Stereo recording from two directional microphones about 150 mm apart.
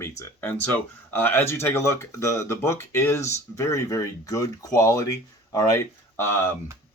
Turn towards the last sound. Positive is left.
turn(degrees=20)  # may be behind; listen again after turning